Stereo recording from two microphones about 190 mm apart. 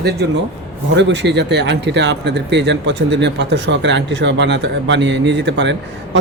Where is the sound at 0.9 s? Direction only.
70° right (ahead or behind).